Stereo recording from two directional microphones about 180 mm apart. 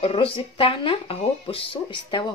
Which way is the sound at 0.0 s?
30° left (ahead or behind).